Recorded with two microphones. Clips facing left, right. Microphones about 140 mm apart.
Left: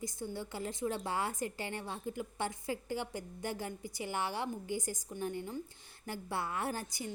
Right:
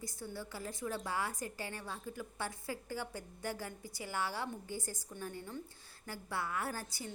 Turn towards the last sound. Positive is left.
turn(degrees=20)  # may be behind; listen again after turning